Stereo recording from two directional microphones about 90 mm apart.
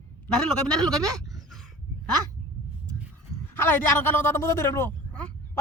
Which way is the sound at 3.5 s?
25° left (ahead or behind).